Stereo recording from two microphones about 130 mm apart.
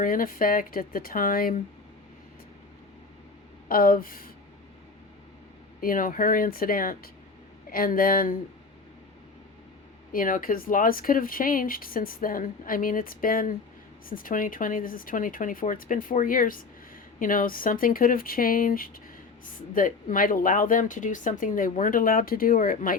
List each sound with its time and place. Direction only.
0.0 s speech: 90° left
3.7 s speech: 90° left
5.8 s speech: 90° left
10.1 s speech: 90° left